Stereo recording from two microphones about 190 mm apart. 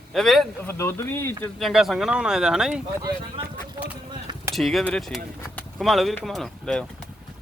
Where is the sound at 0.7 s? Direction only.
15° left (ahead or behind).